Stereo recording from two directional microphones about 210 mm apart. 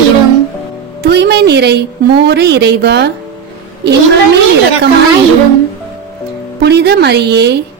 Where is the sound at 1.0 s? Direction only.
55° right (ahead or behind).